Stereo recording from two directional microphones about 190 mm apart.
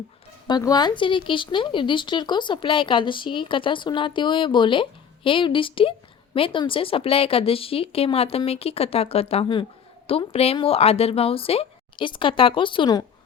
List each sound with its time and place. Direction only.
0.4 s speech: 20° left (ahead or behind)